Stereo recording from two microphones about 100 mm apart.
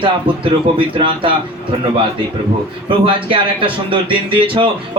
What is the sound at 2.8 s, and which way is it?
A man's voice, 60° right (ahead or behind).